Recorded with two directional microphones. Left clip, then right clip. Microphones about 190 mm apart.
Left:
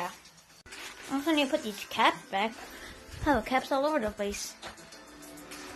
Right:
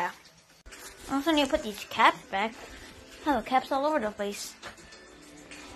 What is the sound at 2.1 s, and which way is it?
A woman's voice, 15° left (ahead or behind).